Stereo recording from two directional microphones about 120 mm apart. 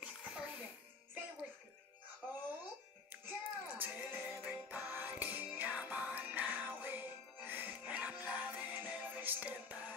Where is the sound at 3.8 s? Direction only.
15° right (ahead or behind).